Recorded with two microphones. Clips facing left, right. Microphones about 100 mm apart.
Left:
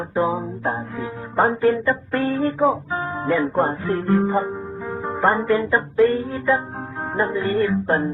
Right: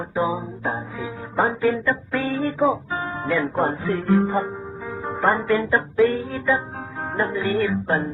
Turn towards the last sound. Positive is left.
turn(degrees=0)  # may be behind; listen again after turning